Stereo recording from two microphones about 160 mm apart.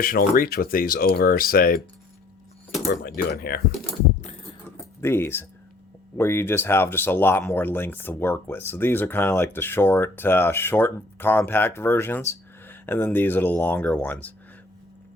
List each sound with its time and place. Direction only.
0.0 s speech: 65° left (ahead or behind)
2.9 s speech: 80° left
4.2 s typing: 40° left (ahead or behind)
4.9 s speech: 15° left (ahead or behind)